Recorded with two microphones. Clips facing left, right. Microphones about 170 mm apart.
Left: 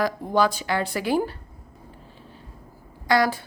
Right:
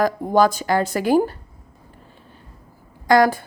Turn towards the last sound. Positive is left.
turn(degrees=-50)  # may be behind; listen again after turning